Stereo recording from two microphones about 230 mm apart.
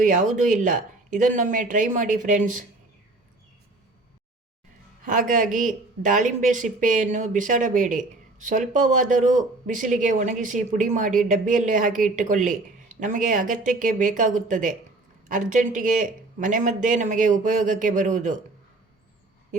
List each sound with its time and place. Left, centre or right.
0.0 s speech: right
5.0 s speech: right